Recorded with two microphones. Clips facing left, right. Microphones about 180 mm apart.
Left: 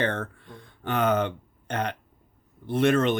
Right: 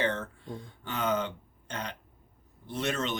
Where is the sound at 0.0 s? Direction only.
55° left (ahead or behind).